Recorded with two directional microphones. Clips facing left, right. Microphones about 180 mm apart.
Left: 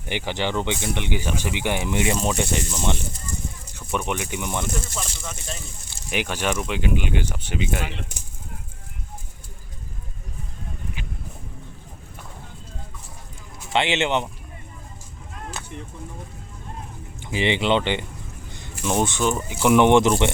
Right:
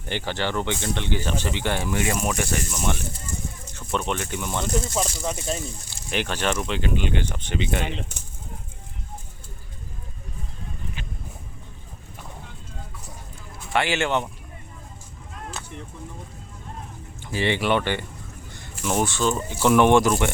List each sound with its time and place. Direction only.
0.0 s speech: 15° left (ahead or behind)
4.9 s speech: 35° right (ahead or behind)
6.1 s speech: 10° left (ahead or behind)
11.0 s a sound: 10° left (ahead or behind)
13.7 s speech: 20° left (ahead or behind)
17.2 s speech: 20° left (ahead or behind)